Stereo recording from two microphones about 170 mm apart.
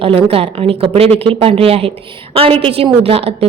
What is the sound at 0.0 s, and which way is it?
A woman's voice, 35° right (ahead or behind).